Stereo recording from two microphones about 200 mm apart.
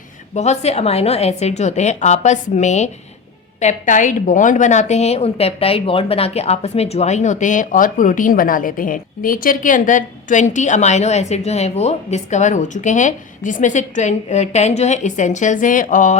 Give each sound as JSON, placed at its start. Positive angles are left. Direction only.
{"t": 0.3, "sound": "a woman's voice", "side_deg": 35}